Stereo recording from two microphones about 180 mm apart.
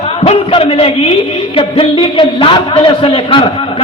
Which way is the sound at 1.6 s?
30° left (ahead or behind).